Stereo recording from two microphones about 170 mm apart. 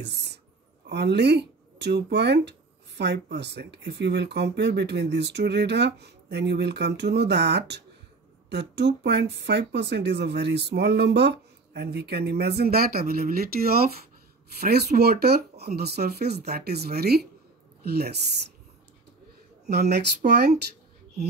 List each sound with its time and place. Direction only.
0.0 s speech: 80° right
19.6 s speech: 70° right (ahead or behind)